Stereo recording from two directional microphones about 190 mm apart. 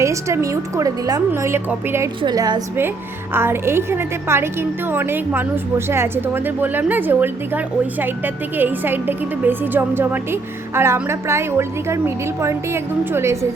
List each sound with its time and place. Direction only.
0.0 s a woman's voice: 15° right (ahead or behind)